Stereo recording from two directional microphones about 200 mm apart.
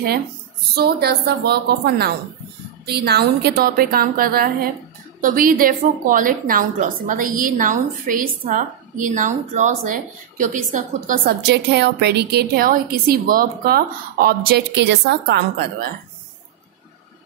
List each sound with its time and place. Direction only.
0.7 s a woman's voice: 50° right (ahead or behind)